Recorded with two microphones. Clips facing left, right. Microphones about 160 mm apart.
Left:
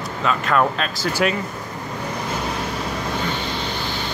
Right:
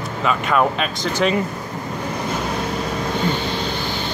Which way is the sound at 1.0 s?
5° left (ahead or behind).